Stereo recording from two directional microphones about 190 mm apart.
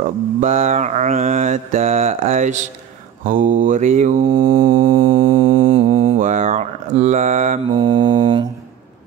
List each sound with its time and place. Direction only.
0.0 s mantra: 40° right (ahead or behind)
4.3 s mantra: 25° right (ahead or behind)
6.1 s speech: 40° right (ahead or behind)
7.7 s mantra: 25° right (ahead or behind)